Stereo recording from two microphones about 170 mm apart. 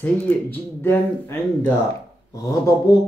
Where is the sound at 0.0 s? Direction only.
10° left (ahead or behind).